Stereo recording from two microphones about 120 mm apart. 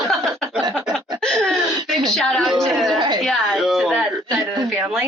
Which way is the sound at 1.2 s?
5° left (ahead or behind).